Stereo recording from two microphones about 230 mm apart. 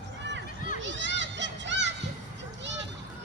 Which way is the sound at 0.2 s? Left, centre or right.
Right.